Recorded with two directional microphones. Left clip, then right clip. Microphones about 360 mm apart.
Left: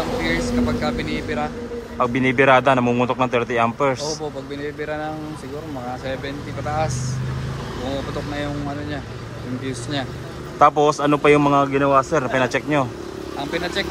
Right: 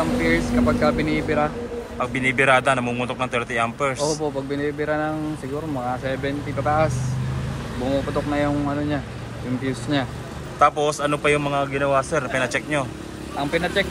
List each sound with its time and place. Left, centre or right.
0.2 s speech: centre
2.1 s speech: centre
4.7 s speech: centre
9.7 s speech: centre
10.6 s speech: centre
13.5 s speech: centre